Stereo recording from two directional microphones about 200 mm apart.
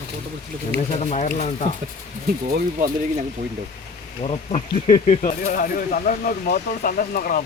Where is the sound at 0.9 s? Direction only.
35° left (ahead or behind).